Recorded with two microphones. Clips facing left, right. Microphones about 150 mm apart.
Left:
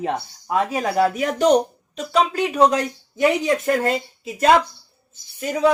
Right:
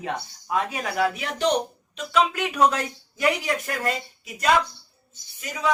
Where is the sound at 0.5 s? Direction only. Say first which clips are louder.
Left 6 dB; 40° left (ahead or behind).